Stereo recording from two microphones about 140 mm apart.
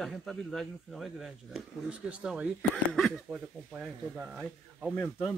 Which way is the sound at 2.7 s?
Centre (ahead or behind).